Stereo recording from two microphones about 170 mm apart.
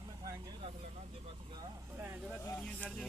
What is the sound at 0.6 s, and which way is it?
Vehicle, 35° right (ahead or behind).